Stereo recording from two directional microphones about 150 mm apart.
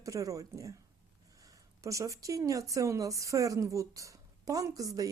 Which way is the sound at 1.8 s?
20° right (ahead or behind).